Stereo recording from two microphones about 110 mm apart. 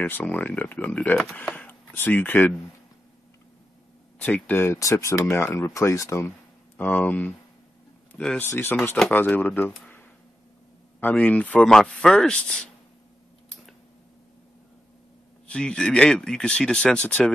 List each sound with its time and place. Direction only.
0.0 s speech: 15° left (ahead or behind)
4.2 s speech: 15° left (ahead or behind)
6.8 s speech: 15° left (ahead or behind)
8.4 s speech: 20° left (ahead or behind)
11.0 s speech: 15° left (ahead or behind)
15.4 s speech: 10° left (ahead or behind)